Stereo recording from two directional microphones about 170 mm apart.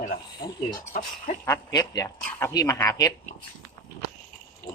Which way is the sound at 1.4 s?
20° left (ahead or behind).